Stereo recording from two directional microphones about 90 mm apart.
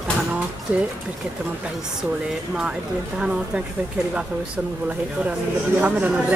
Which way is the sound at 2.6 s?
10° right (ahead or behind).